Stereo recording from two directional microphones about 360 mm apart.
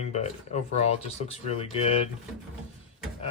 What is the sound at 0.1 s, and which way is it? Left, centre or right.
Speech, centre.